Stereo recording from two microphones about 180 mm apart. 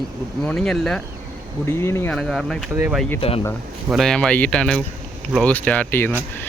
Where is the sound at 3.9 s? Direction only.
Centre (ahead or behind).